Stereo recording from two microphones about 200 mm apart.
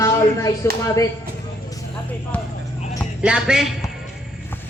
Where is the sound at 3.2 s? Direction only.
5° right (ahead or behind).